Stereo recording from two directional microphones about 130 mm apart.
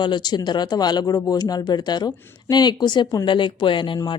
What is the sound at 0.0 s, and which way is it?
Speech, 35° left (ahead or behind).